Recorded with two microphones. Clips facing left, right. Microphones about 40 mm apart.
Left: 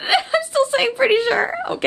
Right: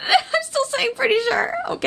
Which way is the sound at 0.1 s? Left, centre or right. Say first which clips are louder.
Even; centre.